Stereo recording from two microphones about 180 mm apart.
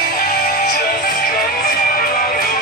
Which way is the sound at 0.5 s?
55° left (ahead or behind).